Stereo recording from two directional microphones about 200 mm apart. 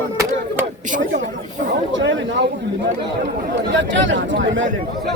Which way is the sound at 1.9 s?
65° right (ahead or behind).